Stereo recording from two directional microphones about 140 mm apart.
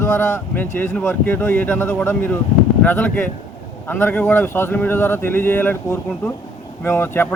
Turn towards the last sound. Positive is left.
turn(degrees=15)  # may be behind; listen again after turning